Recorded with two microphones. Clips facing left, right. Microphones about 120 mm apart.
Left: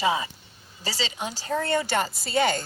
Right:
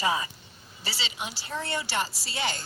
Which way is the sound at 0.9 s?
40° left (ahead or behind).